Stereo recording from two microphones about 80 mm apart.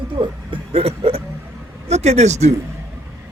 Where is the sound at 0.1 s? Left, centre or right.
Right.